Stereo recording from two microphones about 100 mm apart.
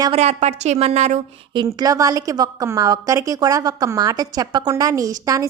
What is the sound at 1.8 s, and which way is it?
A woman's voice, 35° right (ahead or behind).